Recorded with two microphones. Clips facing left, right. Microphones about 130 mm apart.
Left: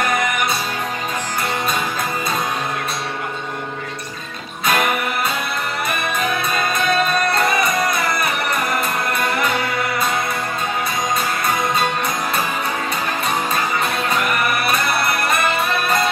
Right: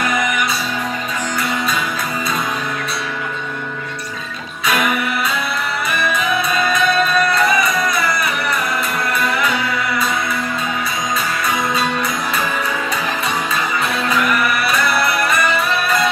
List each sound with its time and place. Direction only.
4.6 s music: 45° left (ahead or behind)
6.1 s music: 45° left (ahead or behind)
14.1 s music: 50° left (ahead or behind)